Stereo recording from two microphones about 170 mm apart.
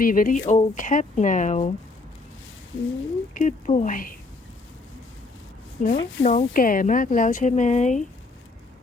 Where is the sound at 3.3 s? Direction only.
45° left (ahead or behind).